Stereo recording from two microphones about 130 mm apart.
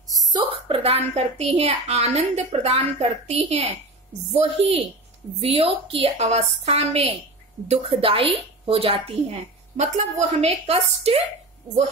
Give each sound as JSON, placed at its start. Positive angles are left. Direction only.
{"t": 0.3, "sound": "a woman's voice", "side_deg": -40}
{"t": 9.8, "sound": "a woman's voice", "side_deg": -60}